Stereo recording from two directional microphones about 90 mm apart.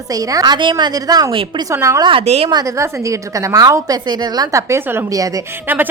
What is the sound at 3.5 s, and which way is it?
A woman's voice, 40° right (ahead or behind).